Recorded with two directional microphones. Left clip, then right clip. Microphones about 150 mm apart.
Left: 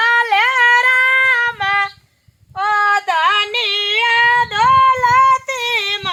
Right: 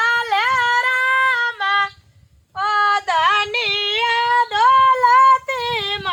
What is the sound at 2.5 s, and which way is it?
Female singing, 65° left (ahead or behind).